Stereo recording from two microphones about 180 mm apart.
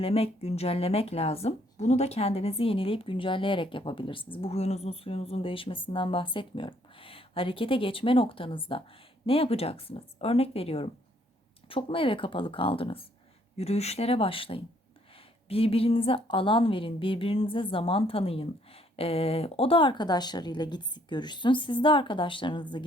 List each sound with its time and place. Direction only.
0.0 s a woman's voice: 35° left (ahead or behind)